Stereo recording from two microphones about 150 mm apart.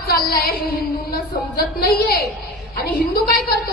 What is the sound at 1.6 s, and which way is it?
A woman's voice, 90° left.